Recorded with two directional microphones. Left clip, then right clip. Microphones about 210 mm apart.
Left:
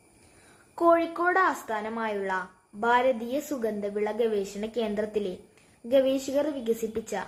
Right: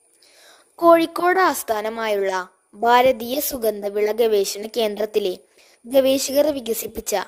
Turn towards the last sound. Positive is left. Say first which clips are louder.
# right 5 dB
turn(degrees=-50)  # may be behind; listen again after turning